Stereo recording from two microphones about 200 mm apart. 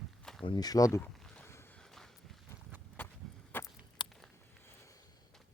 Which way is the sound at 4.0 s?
25° left (ahead or behind).